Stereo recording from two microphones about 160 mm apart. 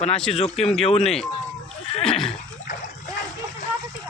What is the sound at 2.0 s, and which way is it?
Neigh, 5° left (ahead or behind).